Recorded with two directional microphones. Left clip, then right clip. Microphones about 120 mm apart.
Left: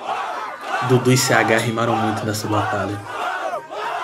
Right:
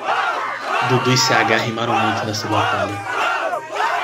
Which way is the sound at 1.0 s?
30° left (ahead or behind).